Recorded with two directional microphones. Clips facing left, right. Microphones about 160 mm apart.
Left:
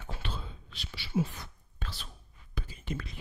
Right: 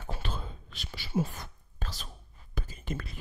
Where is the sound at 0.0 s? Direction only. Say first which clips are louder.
Right 2 dB; 45° right (ahead or behind).